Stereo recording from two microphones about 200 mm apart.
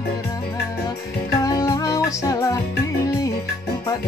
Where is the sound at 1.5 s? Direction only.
20° left (ahead or behind).